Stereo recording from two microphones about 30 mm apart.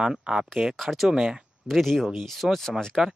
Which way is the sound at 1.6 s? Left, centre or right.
Centre.